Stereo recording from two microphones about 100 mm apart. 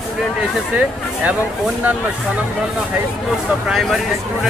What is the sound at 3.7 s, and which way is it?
Speech, centre (ahead or behind).